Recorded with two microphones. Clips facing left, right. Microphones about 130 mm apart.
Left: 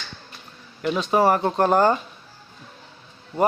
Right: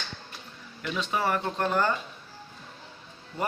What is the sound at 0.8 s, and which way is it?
Speech, 40° left (ahead or behind).